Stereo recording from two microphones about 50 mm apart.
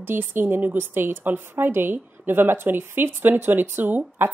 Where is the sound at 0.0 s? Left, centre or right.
Right.